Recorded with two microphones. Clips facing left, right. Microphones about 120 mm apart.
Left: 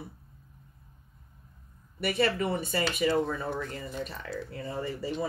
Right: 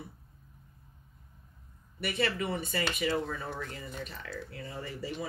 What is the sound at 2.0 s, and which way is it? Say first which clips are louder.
Speech: left 4 dB; 40° left (ahead or behind).